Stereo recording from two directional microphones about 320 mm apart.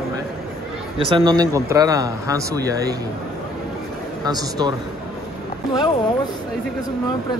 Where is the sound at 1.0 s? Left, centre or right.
Centre.